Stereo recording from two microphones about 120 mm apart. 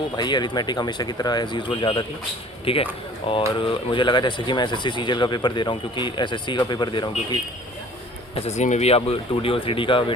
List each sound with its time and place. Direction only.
0.2 s speech: 40° left (ahead or behind)
8.4 s speech: 65° left (ahead or behind); by 10.1 s 45° left (ahead or behind)